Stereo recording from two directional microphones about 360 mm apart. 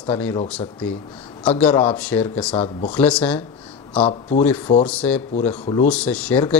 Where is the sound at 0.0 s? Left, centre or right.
Centre.